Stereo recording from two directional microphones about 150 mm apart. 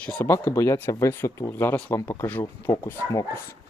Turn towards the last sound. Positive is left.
turn(degrees=20)  # may be behind; listen again after turning